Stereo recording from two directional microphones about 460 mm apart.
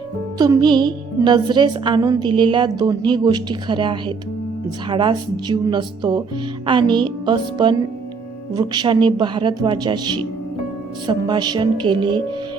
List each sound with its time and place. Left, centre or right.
0.3 s speech: centre